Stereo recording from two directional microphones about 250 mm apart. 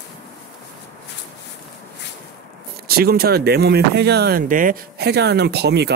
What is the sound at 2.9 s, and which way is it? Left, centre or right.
Speech, right.